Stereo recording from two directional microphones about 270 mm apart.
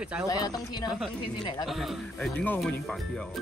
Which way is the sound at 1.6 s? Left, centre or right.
Centre.